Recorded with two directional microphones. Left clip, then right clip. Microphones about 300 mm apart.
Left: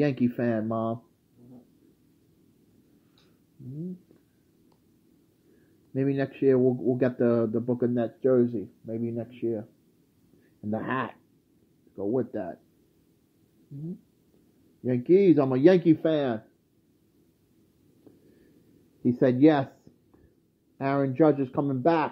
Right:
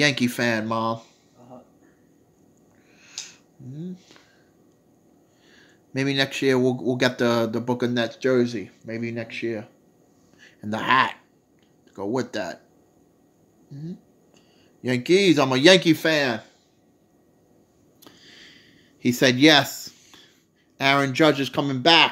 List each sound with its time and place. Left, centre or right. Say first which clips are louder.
0.0 s speech: right 5 dB; centre
5.9 s speech: right 5 dB; centre
8.3 s speech: even; right
10.7 s speech: right 11 dB; centre
14.9 s speech: right 2 dB; centre
19.0 s speech: right 4 dB; centre
20.7 s speech: right 7 dB; centre